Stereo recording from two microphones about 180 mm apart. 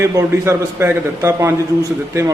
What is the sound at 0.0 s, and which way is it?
A man's voice, 15° right (ahead or behind).